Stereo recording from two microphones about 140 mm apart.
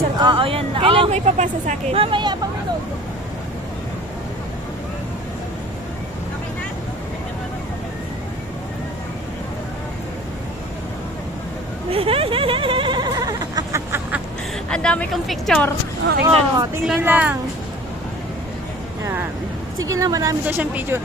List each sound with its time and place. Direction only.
0.2 s speech: 35° right (ahead or behind); by 2.0 s 55° right (ahead or behind)
2.0 s speech: 35° right (ahead or behind)
11.9 s a sound: 40° right (ahead or behind); by 14.2 s 20° right (ahead or behind)
14.7 s a woman's voice: 5° left (ahead or behind)
16.2 s speech: 25° right (ahead or behind)
17.0 s speech: 10° right (ahead or behind)
19.8 s speech: 25° right (ahead or behind)
20.4 s speech: 10° right (ahead or behind)